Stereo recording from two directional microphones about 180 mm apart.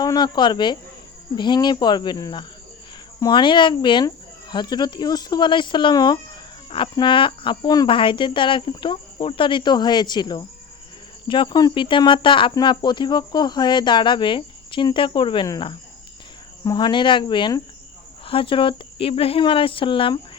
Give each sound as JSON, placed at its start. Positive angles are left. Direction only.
{"t": 0.0, "sound": "speech", "side_deg": 25}